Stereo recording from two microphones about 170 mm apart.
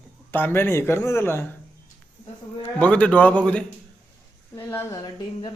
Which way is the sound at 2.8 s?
10° left (ahead or behind).